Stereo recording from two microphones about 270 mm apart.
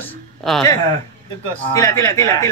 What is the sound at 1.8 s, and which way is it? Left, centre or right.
Speech, centre.